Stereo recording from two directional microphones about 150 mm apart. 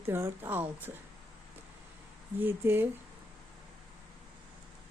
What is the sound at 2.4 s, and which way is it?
Speech, 15° right (ahead or behind).